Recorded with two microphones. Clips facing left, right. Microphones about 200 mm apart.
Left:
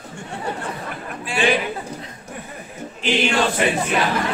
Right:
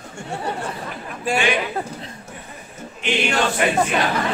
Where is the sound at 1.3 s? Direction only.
45° right (ahead or behind).